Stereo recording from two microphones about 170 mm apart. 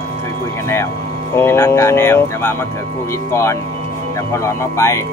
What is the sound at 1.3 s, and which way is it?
Speech, 15° left (ahead or behind).